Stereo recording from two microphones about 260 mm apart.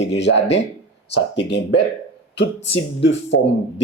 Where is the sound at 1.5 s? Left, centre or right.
Left.